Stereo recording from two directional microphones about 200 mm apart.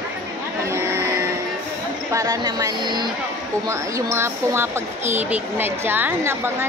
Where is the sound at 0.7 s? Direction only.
15° right (ahead or behind).